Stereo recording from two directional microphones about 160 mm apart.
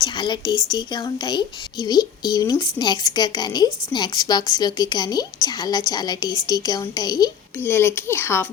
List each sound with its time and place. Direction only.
0.0 s a woman's voice: 25° left (ahead or behind)
7.6 s speech: 15° left (ahead or behind)